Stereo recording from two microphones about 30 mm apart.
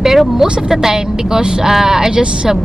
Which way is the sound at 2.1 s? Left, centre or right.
Right.